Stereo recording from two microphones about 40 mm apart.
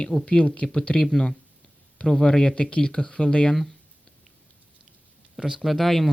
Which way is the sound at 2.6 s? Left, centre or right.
Left.